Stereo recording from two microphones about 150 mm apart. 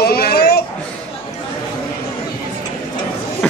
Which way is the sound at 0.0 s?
90° left.